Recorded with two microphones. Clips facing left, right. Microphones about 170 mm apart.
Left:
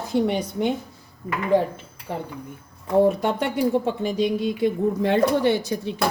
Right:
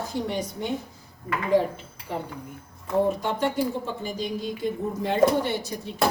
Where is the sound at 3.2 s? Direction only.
65° left (ahead or behind).